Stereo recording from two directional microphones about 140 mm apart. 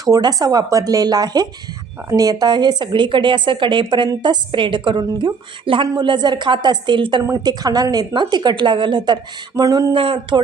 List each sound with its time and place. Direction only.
0.0 s a woman's voice: 25° right (ahead or behind)
9.9 s a woman's voice: 35° right (ahead or behind)